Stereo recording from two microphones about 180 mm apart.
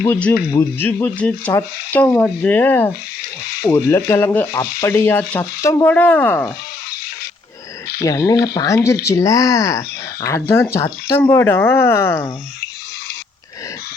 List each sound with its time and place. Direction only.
0.0 s speech: 10° left (ahead or behind)
8.0 s speech: 20° left (ahead or behind)